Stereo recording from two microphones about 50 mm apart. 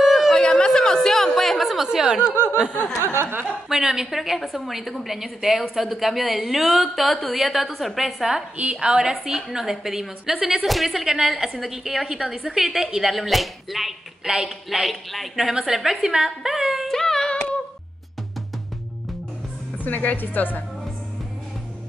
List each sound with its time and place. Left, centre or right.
0.0 s a sound: centre
0.4 s a sound: centre
1.9 s a woman's voice: centre
3.0 s speech: right
3.6 s a woman's voice: centre
8.5 s a woman's voice: right
16.9 s singing: centre
19.8 s a woman's voice: left